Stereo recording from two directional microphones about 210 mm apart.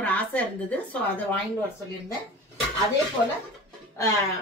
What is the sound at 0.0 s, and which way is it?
A woman's voice, 5° left (ahead or behind).